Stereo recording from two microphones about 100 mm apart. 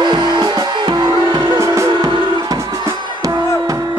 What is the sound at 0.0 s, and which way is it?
Music, 50° right (ahead or behind).